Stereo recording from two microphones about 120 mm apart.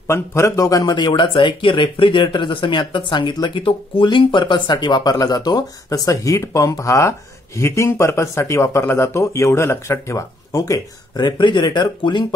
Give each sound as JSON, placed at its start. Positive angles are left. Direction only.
{"t": 0.0, "sound": "speech", "side_deg": 20}